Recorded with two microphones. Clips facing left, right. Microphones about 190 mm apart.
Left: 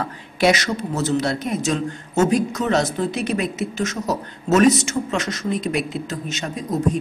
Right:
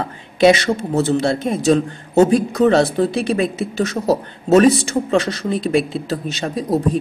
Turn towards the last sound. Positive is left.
turn(degrees=-35)  # may be behind; listen again after turning